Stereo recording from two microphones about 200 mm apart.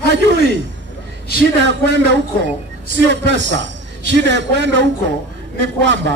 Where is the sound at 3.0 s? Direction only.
60° right (ahead or behind).